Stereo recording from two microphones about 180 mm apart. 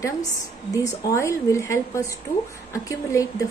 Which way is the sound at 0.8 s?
15° left (ahead or behind).